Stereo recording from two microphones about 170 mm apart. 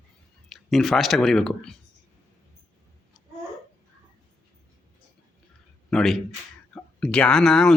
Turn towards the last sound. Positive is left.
turn(degrees=5)  # may be behind; listen again after turning